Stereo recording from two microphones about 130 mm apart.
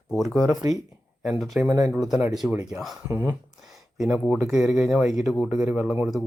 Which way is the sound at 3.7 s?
5° right (ahead or behind).